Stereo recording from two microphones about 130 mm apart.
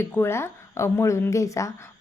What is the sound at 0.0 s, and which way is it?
Speech, 20° left (ahead or behind).